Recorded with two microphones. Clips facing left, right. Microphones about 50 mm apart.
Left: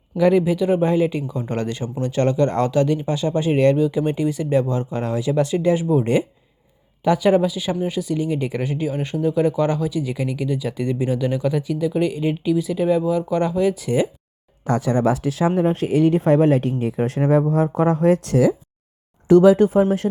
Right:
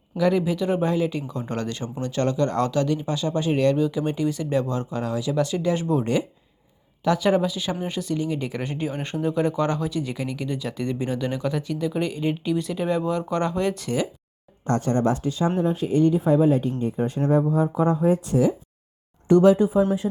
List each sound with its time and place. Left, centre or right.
0.2 s speech: centre
5.7 s speech: centre
15.3 s speech: left